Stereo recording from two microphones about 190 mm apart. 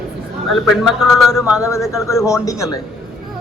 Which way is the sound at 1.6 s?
15° left (ahead or behind).